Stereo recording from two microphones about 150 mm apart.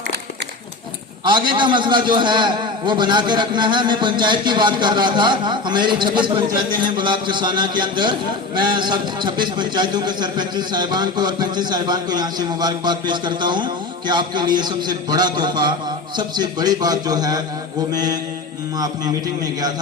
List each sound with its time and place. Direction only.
1.2 s a man's voice: 30° right (ahead or behind)